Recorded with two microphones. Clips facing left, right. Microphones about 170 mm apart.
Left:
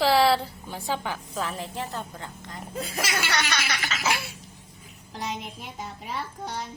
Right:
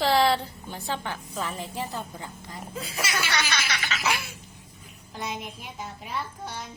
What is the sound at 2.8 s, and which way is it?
Speech, 45° left (ahead or behind).